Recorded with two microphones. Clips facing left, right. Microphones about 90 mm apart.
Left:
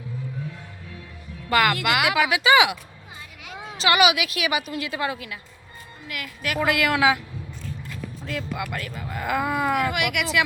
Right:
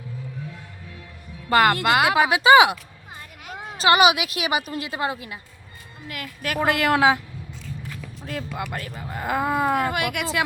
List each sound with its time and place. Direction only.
1.5 s speech: 35° right (ahead or behind)
8.3 s speech: 35° right (ahead or behind)